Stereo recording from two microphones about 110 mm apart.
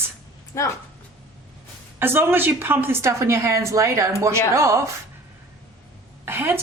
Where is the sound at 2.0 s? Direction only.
20° right (ahead or behind).